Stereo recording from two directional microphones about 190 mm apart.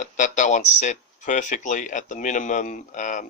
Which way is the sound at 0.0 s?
40° left (ahead or behind).